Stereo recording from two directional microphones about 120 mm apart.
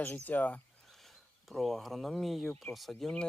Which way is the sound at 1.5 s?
Centre (ahead or behind).